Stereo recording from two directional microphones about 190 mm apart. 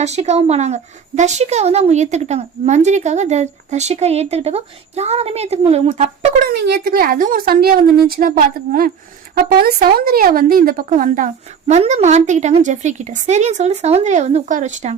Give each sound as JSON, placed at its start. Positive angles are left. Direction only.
{"t": 0.0, "sound": "speech", "side_deg": -35}
{"t": 6.5, "sound": "a woman's voice", "side_deg": -60}